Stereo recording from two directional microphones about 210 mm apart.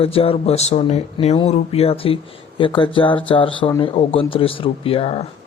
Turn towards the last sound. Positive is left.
turn(degrees=30)  # may be behind; listen again after turning